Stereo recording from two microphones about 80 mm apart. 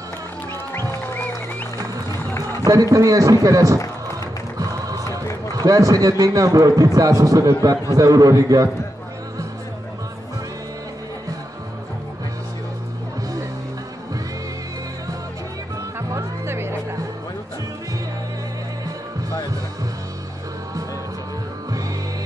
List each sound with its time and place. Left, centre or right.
0.7 s music: left
2.6 s a man's voice: right
4.6 s music: right
5.5 s a man's voice: right
16.1 s music: right